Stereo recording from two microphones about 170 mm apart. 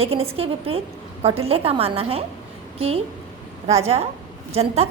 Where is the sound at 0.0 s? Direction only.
35° right (ahead or behind).